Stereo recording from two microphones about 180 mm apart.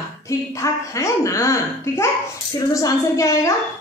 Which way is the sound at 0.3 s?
15° left (ahead or behind).